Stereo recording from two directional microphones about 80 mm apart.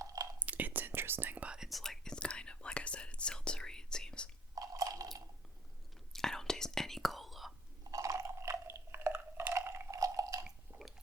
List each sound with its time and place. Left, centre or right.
0.0 s whispering: right
0.3 s whispering: centre
1.5 s whispering: centre
1.8 s whispering: centre
4.5 s chewing: right
6.1 s whispering: centre
7.9 s a sound: right
10.4 s chewing: centre